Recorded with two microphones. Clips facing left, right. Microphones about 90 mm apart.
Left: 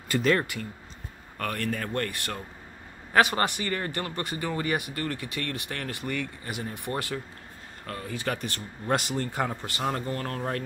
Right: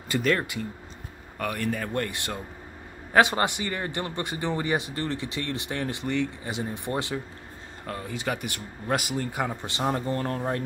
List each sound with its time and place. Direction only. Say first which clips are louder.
0.2 s speech: left 1 dB; centre (ahead or behind)
1.4 s a man's voice: right 2 dB; 10° right (ahead or behind)
9.6 s a man's voice: right 2 dB; 20° right (ahead or behind)